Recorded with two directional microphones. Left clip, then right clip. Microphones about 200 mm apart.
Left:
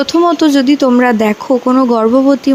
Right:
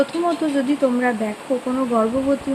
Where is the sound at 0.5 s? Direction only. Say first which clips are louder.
Left 10 dB; 50° left (ahead or behind).